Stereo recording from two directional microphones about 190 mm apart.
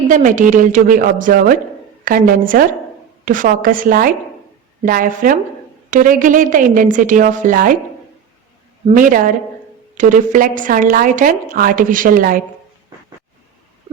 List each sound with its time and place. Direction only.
0.1 s a woman's voice: 45° right (ahead or behind)
9.0 s a woman's voice: 45° right (ahead or behind)